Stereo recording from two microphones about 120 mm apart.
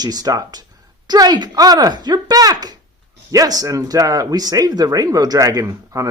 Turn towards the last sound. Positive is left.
turn(degrees=-30)  # may be behind; listen again after turning